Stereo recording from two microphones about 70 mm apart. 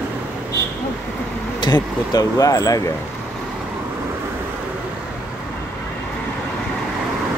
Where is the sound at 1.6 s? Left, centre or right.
Left.